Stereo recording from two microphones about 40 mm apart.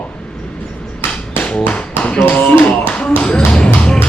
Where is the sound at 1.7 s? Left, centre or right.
Left.